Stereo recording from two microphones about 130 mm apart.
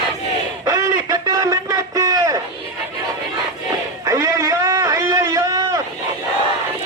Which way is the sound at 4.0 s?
25° right (ahead or behind).